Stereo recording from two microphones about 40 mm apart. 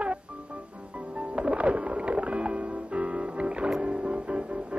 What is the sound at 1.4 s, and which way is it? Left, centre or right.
Music, right.